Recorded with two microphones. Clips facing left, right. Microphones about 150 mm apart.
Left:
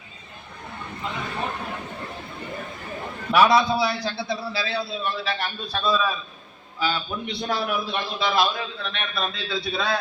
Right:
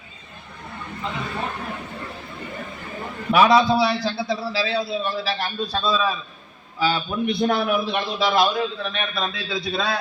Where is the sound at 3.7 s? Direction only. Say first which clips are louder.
Right 4 dB; 25° right (ahead or behind).